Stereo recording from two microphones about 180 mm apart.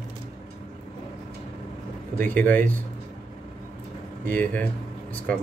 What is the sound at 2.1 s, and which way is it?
Speech, 10° left (ahead or behind).